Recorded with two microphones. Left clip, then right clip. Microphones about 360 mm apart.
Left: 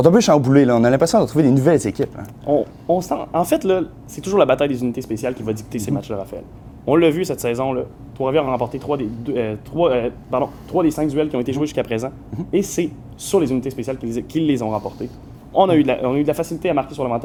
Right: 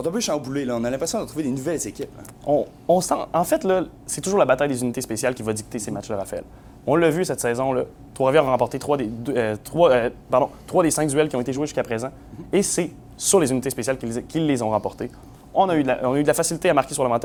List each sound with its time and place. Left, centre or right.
0.0 s speech: left
2.5 s speech: right
3.4 s speech: right
7.8 s speech: right
12.5 s speech: right
15.5 s speech: centre
16.1 s speech: right